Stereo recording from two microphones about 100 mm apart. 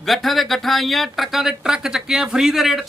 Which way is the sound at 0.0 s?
Centre (ahead or behind).